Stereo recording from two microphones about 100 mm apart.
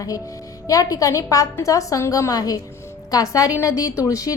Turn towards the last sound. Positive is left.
turn(degrees=35)  # may be behind; listen again after turning